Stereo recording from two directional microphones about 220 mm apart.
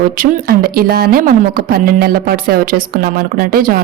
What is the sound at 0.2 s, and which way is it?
Speech, 40° right (ahead or behind).